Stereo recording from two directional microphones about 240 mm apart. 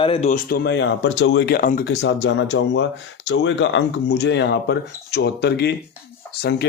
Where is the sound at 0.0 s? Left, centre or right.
Left.